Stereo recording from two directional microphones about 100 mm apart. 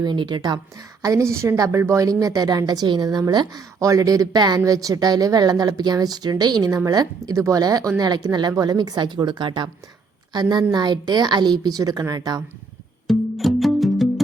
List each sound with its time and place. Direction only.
0.0 s a woman's voice: 50° right (ahead or behind)
1.0 s a woman's voice: 30° right (ahead or behind)
13.1 s music: centre (ahead or behind)